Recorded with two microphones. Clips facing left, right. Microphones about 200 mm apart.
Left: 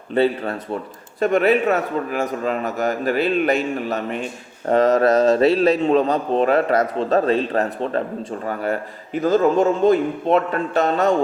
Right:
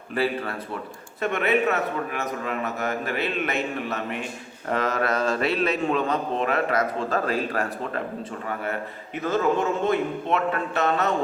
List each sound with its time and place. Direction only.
0.1 s a man's voice: 25° left (ahead or behind)